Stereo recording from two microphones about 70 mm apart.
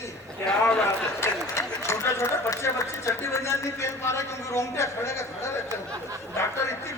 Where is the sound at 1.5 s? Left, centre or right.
Left.